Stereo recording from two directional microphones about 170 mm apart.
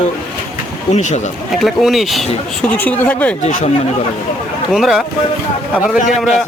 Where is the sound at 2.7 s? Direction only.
10° left (ahead or behind).